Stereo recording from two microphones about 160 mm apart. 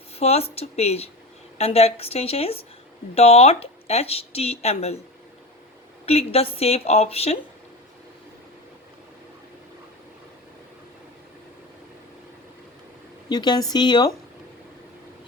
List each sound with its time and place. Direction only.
0.2 s speech: 40° left (ahead or behind)
6.1 s speech: 40° left (ahead or behind)
13.2 s speech: 25° left (ahead or behind)